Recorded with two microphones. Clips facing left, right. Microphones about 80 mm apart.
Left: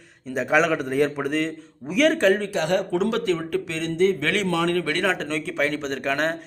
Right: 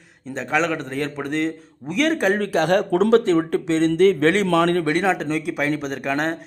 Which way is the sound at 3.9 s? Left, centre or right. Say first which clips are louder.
Right 3 dB; right.